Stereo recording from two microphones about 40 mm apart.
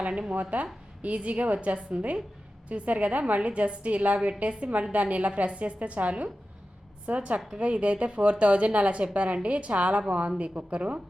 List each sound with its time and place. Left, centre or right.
0.0 s a woman's voice: right